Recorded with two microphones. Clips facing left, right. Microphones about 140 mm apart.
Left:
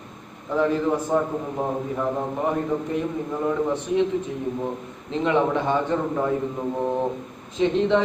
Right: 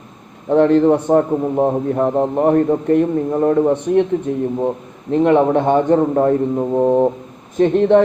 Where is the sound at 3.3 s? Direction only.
40° right (ahead or behind).